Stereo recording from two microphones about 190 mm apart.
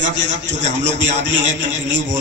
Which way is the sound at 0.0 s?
70° right (ahead or behind).